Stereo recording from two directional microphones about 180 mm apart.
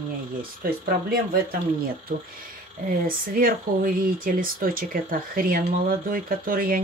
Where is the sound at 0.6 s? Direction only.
55° right (ahead or behind).